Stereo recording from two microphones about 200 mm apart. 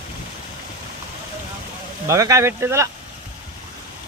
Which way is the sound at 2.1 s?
15° right (ahead or behind).